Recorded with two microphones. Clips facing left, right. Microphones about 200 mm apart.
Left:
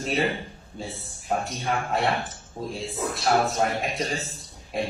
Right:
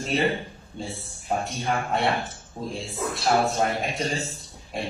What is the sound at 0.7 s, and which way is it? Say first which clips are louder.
A man's voice: right 1 dB; centre (ahead or behind).